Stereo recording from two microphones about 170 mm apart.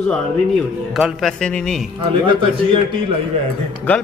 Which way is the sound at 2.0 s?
30° right (ahead or behind).